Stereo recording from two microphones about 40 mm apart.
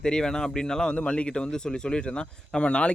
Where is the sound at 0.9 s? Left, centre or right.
Left.